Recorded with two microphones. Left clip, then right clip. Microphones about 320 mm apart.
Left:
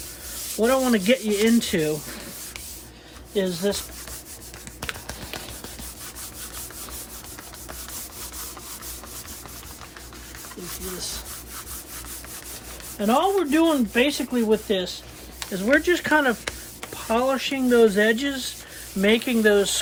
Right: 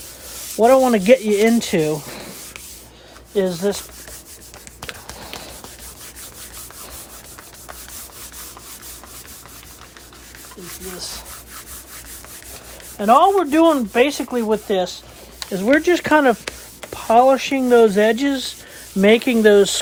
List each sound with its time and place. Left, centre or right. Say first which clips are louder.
0.6 s speech: right 8 dB; centre
3.3 s speech: right 5 dB; centre
4.8 s run: even; centre
13.0 s speech: right 8 dB; centre